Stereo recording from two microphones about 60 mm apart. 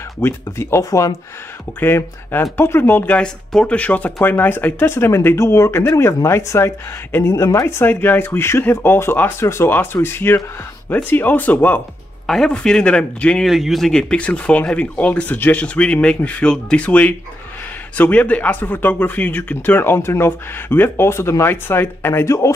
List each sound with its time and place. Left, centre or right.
0.2 s speech: left
0.8 s speech: left
2.5 s speech: left
3.1 s speech: centre; by 10.4 s left
10.9 s speech: left
12.3 s speech: centre
13.4 s speech: centre; by 15.3 s left
15.3 s speech: left
15.6 s speech: centre; by 22.2 s left
22.2 s speech: left